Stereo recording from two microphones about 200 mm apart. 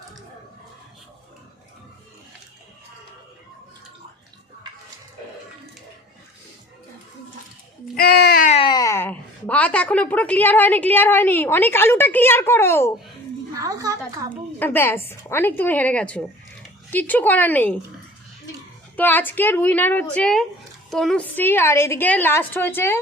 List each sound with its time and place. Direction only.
7.9 s baby cry: 50° left (ahead or behind)
8.4 s speech: 25° left (ahead or behind); by 12.9 s 10° left (ahead or behind)
13.5 s a sound: 15° right (ahead or behind)
14.6 s a woman's voice: 10° left (ahead or behind)
18.9 s a woman's voice: 10° left (ahead or behind)